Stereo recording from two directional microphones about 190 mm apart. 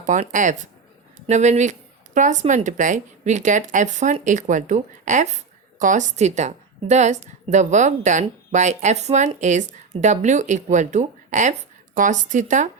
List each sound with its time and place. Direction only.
0.0 s a woman's voice: 40° right (ahead or behind)